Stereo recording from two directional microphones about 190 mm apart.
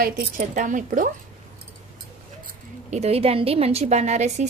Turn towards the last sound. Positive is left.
turn(degrees=-35)  # may be behind; listen again after turning